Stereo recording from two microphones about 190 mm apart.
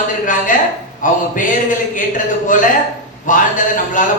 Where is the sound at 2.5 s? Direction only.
45° left (ahead or behind).